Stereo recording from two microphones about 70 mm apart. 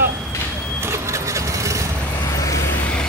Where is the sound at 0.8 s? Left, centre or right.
Right.